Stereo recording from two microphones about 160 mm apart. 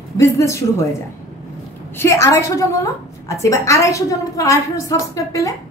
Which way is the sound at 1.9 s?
15° left (ahead or behind).